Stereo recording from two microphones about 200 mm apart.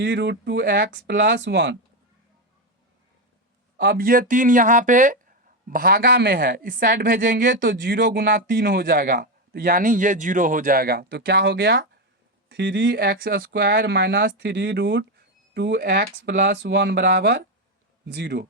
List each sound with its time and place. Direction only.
0.0 s speech: 60° right (ahead or behind)
3.8 s a man's voice: 50° right (ahead or behind)